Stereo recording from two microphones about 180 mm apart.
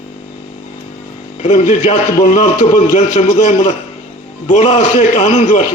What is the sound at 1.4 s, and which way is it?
A man's voice, 35° left (ahead or behind).